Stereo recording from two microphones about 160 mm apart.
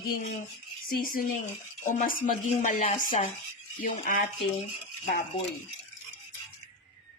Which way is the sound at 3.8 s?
60° left (ahead or behind).